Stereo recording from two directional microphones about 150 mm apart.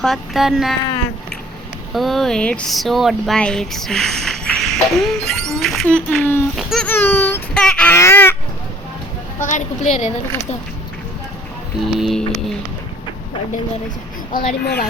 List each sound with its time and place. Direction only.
0.0 s speech: centre (ahead or behind)
1.9 s a child's voice: centre (ahead or behind)
6.6 s speech: centre (ahead or behind)
6.8 s a child's voice: 15° left (ahead or behind)
7.5 s a sound: 5° left (ahead or behind)
9.4 s a woman's voice: 55° left (ahead or behind)
11.9 s speech: centre (ahead or behind)
14.3 s speech: 90° left